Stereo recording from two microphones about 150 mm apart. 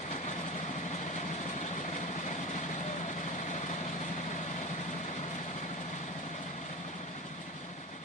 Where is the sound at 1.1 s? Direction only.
55° left (ahead or behind).